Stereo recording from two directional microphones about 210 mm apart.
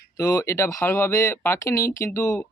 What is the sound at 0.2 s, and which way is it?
Speech, 15° left (ahead or behind).